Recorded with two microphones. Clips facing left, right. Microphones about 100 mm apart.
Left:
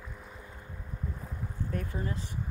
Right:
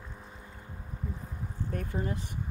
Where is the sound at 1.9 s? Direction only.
20° right (ahead or behind).